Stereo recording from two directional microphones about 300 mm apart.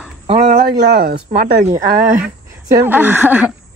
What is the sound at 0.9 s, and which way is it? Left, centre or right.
Speech, right.